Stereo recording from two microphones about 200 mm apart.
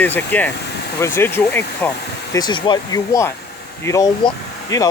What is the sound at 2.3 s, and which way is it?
Speech, 20° left (ahead or behind).